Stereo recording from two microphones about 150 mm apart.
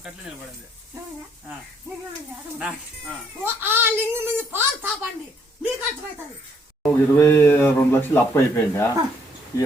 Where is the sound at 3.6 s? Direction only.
15° right (ahead or behind).